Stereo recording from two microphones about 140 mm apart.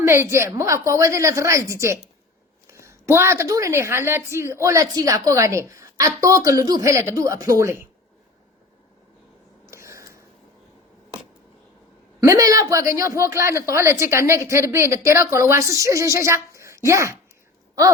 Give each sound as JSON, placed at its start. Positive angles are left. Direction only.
{"t": 0.0, "sound": "a woman's voice", "side_deg": -20}
{"t": 9.6, "sound": "a sound", "side_deg": -20}
{"t": 12.2, "sound": "a woman's voice", "side_deg": -25}